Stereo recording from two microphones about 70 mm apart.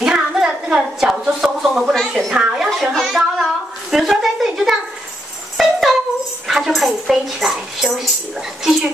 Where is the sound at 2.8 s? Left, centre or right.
Centre.